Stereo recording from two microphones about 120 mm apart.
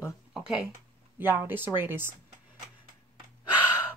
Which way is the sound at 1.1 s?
15° right (ahead or behind).